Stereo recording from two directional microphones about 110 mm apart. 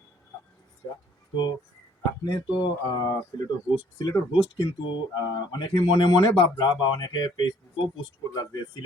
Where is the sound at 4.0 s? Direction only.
35° left (ahead or behind).